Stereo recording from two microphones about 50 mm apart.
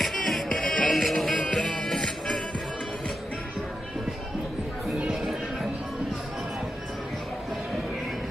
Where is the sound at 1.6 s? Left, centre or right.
Centre.